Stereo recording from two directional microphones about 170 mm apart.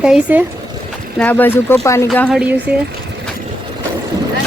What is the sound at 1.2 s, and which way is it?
Speech, 10° left (ahead or behind).